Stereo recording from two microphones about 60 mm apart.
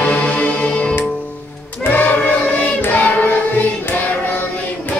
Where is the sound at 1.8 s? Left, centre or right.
Left.